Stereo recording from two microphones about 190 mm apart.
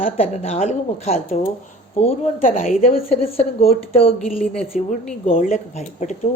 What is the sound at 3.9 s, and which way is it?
Speech, 30° left (ahead or behind).